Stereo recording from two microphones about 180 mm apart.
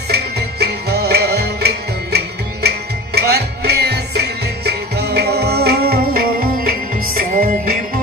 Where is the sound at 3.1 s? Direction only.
65° right (ahead or behind).